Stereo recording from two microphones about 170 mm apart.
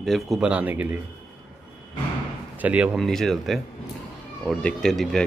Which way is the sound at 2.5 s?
10° right (ahead or behind).